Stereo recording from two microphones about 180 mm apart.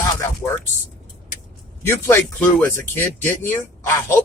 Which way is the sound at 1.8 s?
15° left (ahead or behind).